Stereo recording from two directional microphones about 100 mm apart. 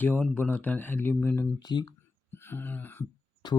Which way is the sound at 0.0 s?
15° left (ahead or behind).